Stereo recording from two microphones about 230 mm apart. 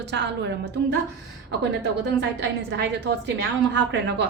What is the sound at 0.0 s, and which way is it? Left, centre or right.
Speech, right.